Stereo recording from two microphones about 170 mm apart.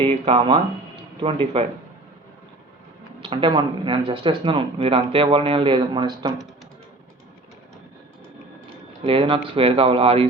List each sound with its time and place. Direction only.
0.0 s speech: 35° right (ahead or behind)
3.2 s speech: 30° right (ahead or behind)
9.0 s speech: 30° right (ahead or behind)